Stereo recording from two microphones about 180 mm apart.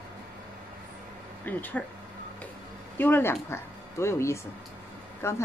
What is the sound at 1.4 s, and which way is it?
Speech, 10° left (ahead or behind).